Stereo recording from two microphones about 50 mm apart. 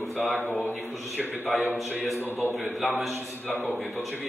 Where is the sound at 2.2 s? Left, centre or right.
Left.